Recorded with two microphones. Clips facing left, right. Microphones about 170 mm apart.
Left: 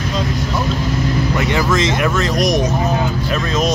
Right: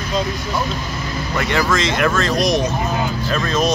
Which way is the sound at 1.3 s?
20° left (ahead or behind).